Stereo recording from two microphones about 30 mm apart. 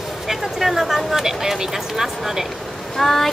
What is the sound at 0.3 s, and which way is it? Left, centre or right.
Speech, centre.